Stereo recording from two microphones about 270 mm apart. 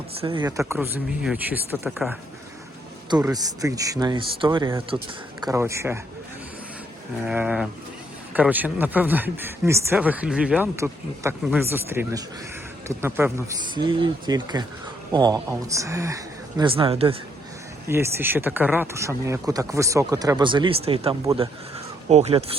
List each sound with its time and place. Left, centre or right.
0.2 s speech: centre
3.2 s speech: centre
7.2 s speech: centre; by 17.2 s right
17.8 s speech: centre